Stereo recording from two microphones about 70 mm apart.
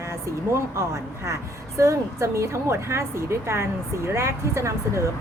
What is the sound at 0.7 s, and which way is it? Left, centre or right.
A woman's voice, right.